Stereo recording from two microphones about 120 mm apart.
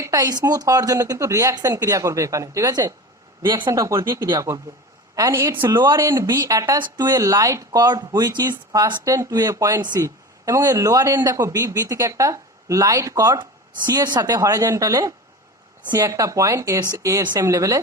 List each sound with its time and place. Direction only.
0.0 s speech: 30° right (ahead or behind)
5.7 s speech: 35° right (ahead or behind)
6.0 s speech: 20° right (ahead or behind)